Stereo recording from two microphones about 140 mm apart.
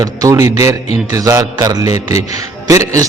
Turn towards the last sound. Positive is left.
turn(degrees=-25)  # may be behind; listen again after turning